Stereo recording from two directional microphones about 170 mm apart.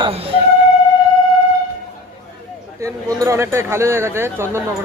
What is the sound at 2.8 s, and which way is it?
Speech, 20° right (ahead or behind).